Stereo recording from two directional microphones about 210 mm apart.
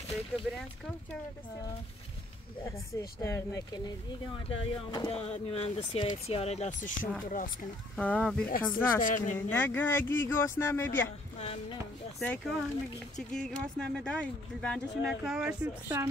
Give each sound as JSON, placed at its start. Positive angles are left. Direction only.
{"t": 2.6, "sound": "speech", "side_deg": 15}
{"t": 7.9, "sound": "speech", "side_deg": 5}
{"t": 9.0, "sound": "speech", "side_deg": 35}
{"t": 9.5, "sound": "speech", "side_deg": 5}
{"t": 11.3, "sound": "speech", "side_deg": 30}
{"t": 12.2, "sound": "speech", "side_deg": 5}